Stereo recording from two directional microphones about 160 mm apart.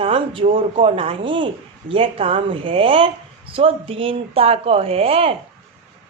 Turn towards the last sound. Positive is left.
turn(degrees=-35)  # may be behind; listen again after turning